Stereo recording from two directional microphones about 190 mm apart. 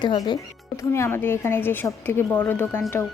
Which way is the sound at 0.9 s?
15° left (ahead or behind).